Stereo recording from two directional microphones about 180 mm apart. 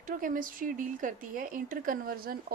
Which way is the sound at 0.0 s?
50° right (ahead or behind).